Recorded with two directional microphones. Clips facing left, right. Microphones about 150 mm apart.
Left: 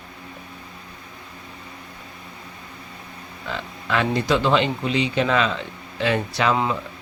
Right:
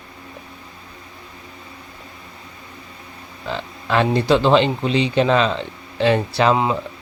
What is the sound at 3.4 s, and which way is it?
Speech, 30° right (ahead or behind).